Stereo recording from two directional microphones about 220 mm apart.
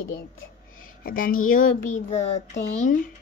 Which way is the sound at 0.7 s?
40° left (ahead or behind).